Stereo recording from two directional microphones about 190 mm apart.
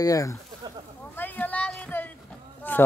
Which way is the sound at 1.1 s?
10° left (ahead or behind).